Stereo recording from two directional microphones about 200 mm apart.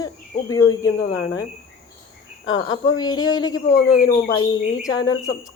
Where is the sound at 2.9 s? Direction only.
20° left (ahead or behind).